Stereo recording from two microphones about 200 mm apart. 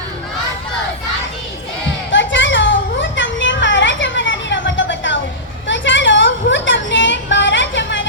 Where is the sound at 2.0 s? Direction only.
65° left (ahead or behind).